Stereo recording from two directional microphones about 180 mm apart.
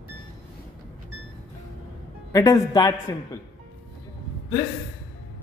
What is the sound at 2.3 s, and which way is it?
A man's voice, 20° left (ahead or behind).